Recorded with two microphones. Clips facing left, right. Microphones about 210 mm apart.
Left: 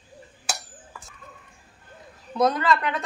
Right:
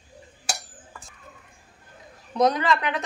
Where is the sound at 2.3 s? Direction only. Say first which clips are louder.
Right 1 dB; 20° right (ahead or behind).